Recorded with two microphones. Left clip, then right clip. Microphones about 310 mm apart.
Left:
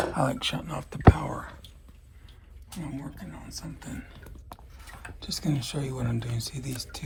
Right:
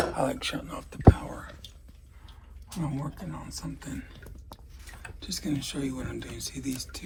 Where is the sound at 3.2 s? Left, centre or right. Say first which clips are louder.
Right 2 dB; centre.